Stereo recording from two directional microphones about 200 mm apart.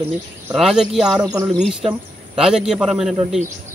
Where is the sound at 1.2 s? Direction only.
20° right (ahead or behind).